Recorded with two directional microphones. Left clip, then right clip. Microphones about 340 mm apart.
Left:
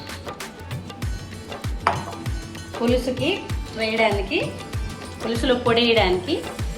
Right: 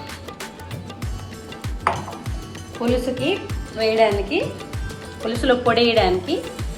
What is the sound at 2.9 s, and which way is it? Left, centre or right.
Speech, centre.